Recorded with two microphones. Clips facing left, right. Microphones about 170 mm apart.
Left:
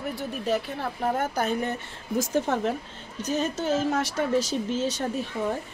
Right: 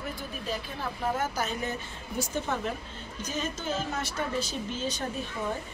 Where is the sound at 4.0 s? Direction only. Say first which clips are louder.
Left 7 dB; 85° left.